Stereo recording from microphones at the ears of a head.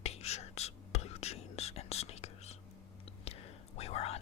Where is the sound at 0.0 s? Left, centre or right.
Left.